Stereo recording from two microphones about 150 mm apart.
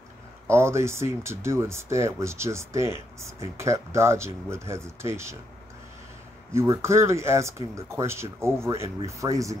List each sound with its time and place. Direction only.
0.5 s speech: 15° right (ahead or behind)
6.5 s speech: 20° right (ahead or behind)